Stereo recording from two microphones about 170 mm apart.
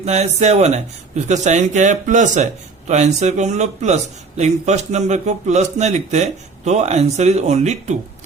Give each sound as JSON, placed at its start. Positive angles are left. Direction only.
{"t": 0.0, "sound": "speech", "side_deg": -40}